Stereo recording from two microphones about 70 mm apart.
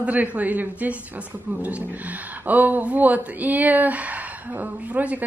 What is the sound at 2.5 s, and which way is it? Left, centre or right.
Speech, right.